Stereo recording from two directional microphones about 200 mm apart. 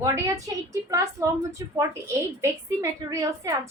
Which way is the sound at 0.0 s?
15° right (ahead or behind).